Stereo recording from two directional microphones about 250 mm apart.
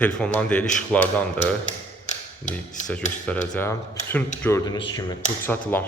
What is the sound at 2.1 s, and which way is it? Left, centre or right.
Tap, left.